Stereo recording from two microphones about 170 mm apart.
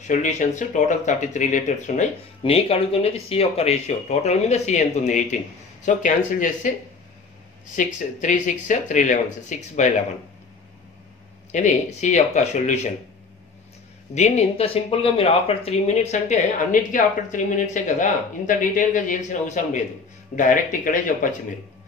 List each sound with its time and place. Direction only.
0.0 s speech: 45° left (ahead or behind)
11.5 s speech: 45° left (ahead or behind)
14.1 s speech: 40° left (ahead or behind)